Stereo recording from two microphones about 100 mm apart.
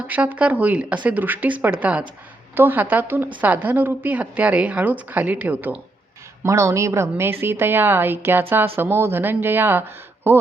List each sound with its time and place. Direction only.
0.1 s a woman's voice: 15° right (ahead or behind)
6.4 s a woman's voice: 30° right (ahead or behind)